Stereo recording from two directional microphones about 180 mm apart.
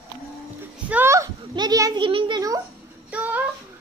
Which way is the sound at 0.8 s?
10° right (ahead or behind).